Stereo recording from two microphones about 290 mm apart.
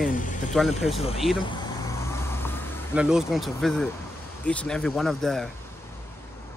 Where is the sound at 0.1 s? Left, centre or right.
Left.